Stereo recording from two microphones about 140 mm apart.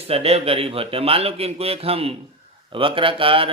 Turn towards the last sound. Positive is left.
turn(degrees=-40)  # may be behind; listen again after turning